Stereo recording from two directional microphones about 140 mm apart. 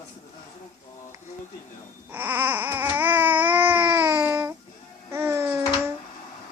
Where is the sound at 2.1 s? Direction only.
15° right (ahead or behind).